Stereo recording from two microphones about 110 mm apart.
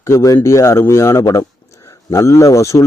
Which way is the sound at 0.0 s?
30° left (ahead or behind).